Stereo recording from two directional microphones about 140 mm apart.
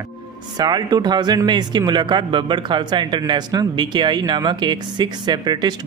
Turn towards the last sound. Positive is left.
turn(degrees=-30)  # may be behind; listen again after turning